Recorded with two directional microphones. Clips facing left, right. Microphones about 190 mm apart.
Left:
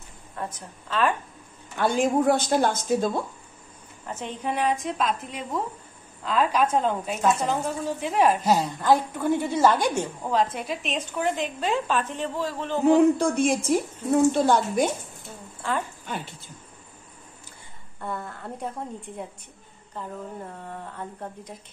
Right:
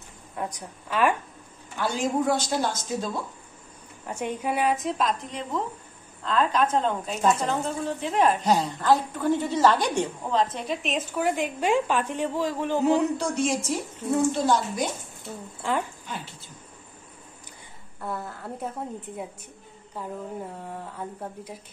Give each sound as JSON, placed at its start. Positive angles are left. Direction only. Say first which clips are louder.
{"t": 0.4, "sound": "speech", "louder": "right 1 dB", "side_deg": -15}
{"t": 1.8, "sound": "a woman's voice", "louder": "left 4 dB", "side_deg": 55}
{"t": 4.1, "sound": "a woman's voice", "louder": "right 2 dB", "side_deg": -10}
{"t": 13.2, "sound": "a woman's voice", "louder": "left 3 dB", "side_deg": 55}
{"t": 15.6, "sound": "speech", "louder": "right 1 dB", "side_deg": -15}
{"t": 18.0, "sound": "a woman's voice", "louder": "even", "side_deg": -5}
{"t": 19.9, "sound": "speech", "louder": "right 1 dB", "side_deg": -10}